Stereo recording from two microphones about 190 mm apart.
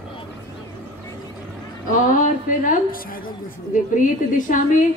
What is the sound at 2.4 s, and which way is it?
A woman's voice, 45° left (ahead or behind).